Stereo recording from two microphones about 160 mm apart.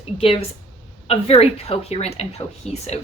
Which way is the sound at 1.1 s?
40° left (ahead or behind).